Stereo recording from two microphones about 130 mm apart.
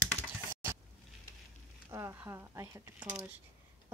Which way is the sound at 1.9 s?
25° right (ahead or behind).